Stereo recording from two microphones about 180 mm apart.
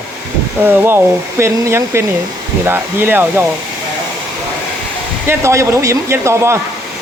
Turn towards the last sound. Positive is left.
turn(degrees=-15)  # may be behind; listen again after turning